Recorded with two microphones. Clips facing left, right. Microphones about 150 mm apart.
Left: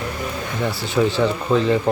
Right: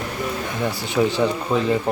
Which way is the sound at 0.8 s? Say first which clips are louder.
Left 1 dB; 15° right (ahead or behind).